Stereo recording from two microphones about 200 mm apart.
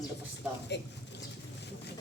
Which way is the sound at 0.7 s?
60° left (ahead or behind).